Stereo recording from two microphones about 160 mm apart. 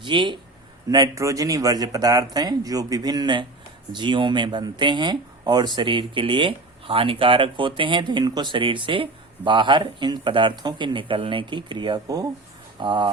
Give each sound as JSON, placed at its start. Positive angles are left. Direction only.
{"t": 0.0, "sound": "speech", "side_deg": -30}